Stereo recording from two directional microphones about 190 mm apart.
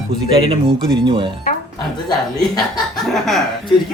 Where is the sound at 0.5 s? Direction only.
25° right (ahead or behind).